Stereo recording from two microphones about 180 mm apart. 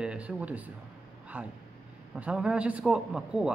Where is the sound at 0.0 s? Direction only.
5° right (ahead or behind).